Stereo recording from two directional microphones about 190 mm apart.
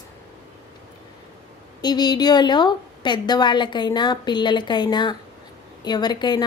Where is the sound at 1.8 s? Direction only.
20° left (ahead or behind).